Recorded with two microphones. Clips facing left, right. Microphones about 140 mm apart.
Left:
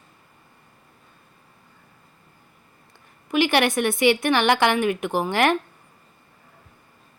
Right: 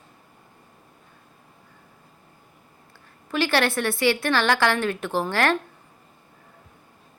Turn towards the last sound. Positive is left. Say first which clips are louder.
# left 2 dB
turn(degrees=15)  # may be behind; listen again after turning